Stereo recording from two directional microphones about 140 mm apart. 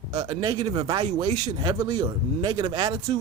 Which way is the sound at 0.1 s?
35° right (ahead or behind).